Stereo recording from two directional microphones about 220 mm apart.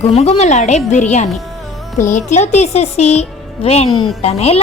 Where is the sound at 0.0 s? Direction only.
30° left (ahead or behind).